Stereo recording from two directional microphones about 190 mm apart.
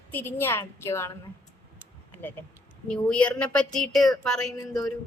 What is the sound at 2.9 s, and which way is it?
A woman's voice, 5° left (ahead or behind).